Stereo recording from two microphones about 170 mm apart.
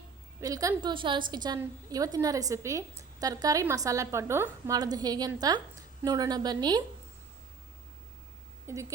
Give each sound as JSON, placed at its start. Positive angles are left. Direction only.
{"t": 0.3, "sound": "a woman's voice", "side_deg": -20}
{"t": 8.6, "sound": "speech", "side_deg": -15}